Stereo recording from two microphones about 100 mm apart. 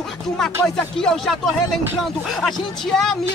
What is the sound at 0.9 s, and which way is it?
Speech, 5° left (ahead or behind).